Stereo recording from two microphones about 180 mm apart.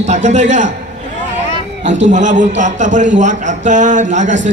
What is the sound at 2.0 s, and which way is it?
A man's voice, 45° right (ahead or behind).